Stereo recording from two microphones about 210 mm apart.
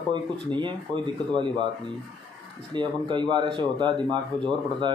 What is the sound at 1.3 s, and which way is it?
Speech, 20° right (ahead or behind).